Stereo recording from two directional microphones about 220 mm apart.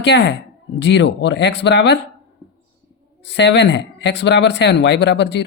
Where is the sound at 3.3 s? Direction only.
50° left (ahead or behind).